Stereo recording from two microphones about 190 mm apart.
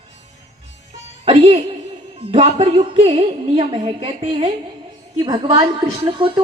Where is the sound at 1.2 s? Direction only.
30° right (ahead or behind).